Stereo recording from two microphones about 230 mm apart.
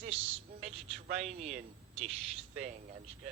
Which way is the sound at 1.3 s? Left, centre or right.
Right.